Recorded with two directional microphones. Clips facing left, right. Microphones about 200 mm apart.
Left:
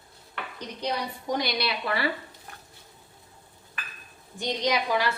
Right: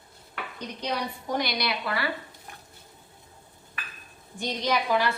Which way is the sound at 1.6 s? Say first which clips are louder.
Left 1 dB; 30° left (ahead or behind).